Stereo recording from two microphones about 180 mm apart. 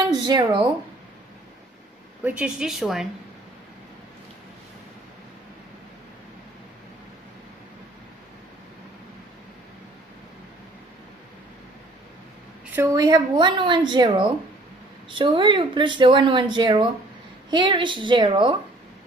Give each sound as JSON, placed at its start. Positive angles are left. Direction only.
{"t": 0.1, "sound": "speech", "side_deg": -25}
{"t": 2.2, "sound": "a woman's voice", "side_deg": -5}
{"t": 12.7, "sound": "speech", "side_deg": -15}